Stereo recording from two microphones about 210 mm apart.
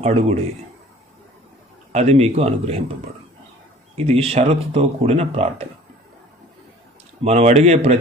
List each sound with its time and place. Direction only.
0.0 s speech: 30° right (ahead or behind)
1.9 s speech: 30° right (ahead or behind)
3.9 s speech: 30° right (ahead or behind)
7.2 s speech: 30° right (ahead or behind)